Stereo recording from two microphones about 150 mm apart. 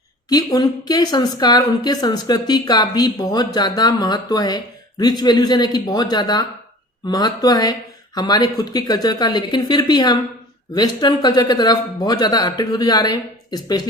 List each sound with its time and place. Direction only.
0.3 s a woman's voice: 25° left (ahead or behind)